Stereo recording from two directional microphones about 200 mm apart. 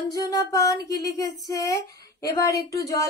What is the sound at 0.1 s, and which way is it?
A woman's voice, 15° left (ahead or behind).